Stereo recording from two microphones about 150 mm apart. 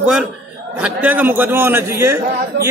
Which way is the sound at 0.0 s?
5° right (ahead or behind).